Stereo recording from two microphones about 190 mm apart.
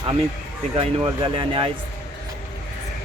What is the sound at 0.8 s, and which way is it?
Speech, 25° right (ahead or behind).